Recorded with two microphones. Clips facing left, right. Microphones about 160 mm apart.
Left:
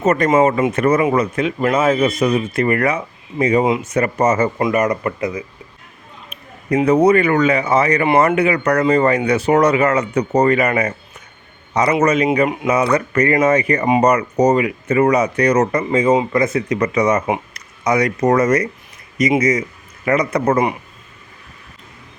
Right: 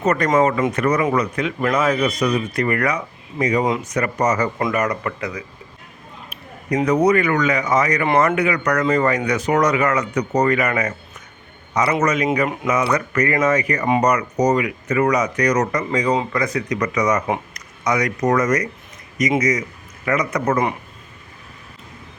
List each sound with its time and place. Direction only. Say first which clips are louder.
0.0 s speech: left 3 dB; 20° left (ahead or behind)
6.8 s a man's voice: left 4 dB; 30° left (ahead or behind)